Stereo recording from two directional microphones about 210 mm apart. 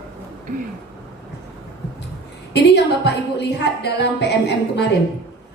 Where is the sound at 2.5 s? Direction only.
55° left (ahead or behind).